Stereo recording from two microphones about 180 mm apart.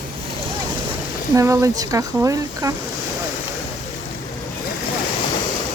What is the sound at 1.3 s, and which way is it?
Speech, 15° right (ahead or behind).